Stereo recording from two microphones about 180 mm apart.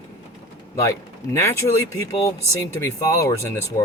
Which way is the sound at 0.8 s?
15° left (ahead or behind).